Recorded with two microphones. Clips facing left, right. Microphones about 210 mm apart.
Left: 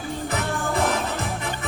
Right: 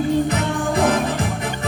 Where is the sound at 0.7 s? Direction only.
15° right (ahead or behind).